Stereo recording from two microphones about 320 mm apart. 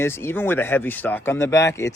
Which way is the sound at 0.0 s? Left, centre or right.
Centre.